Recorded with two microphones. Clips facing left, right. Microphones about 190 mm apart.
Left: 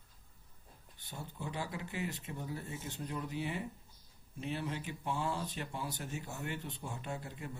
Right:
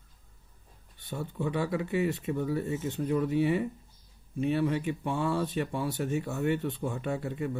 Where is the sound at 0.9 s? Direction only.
60° right (ahead or behind).